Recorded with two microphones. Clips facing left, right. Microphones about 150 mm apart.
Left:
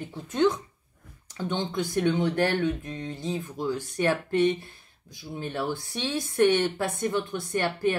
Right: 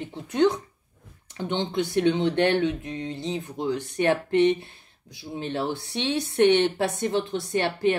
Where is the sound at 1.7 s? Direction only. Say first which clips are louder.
Right 3 dB; 65° right (ahead or behind).